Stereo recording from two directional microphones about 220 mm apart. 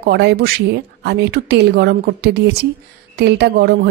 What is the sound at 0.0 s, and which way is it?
A woman's voice, 50° right (ahead or behind).